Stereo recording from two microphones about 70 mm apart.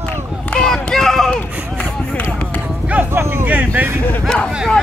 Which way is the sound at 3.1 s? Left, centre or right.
Right.